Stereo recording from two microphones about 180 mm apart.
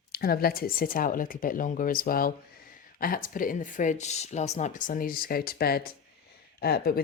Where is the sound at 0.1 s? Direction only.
55° left (ahead or behind).